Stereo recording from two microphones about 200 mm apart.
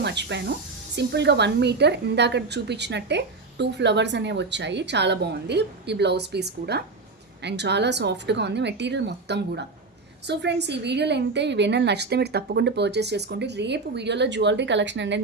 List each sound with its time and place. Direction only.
0.0 s speech: 60° right (ahead or behind)